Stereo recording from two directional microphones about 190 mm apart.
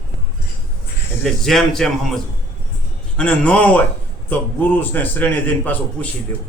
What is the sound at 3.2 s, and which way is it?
A man's voice, 5° left (ahead or behind).